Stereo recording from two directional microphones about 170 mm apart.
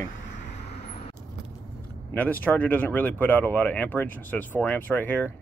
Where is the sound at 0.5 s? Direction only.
35° left (ahead or behind).